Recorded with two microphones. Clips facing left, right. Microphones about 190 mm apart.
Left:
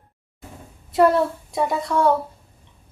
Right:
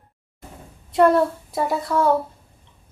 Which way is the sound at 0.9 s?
Centre (ahead or behind).